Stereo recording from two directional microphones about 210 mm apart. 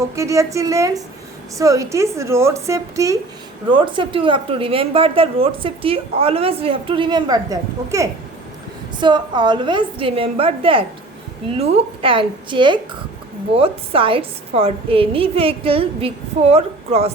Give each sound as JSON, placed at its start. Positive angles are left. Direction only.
{"t": 0.2, "sound": "a woman's voice", "side_deg": -15}